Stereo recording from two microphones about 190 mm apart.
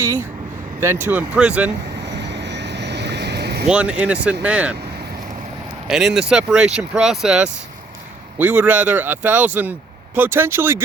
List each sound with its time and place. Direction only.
0.8 s speech: 10° right (ahead or behind)
2.0 s vehicle: 65° right (ahead or behind)
3.7 s speech: 5° right (ahead or behind)
5.9 s speech: centre (ahead or behind)